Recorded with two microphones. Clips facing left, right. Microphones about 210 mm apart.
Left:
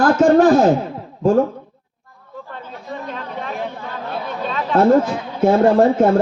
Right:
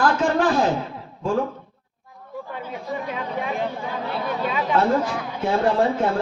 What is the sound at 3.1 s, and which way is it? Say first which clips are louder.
Speech: right 1 dB; 10° right (ahead or behind).